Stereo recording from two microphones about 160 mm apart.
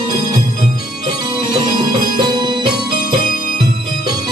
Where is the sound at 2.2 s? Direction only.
30° right (ahead or behind).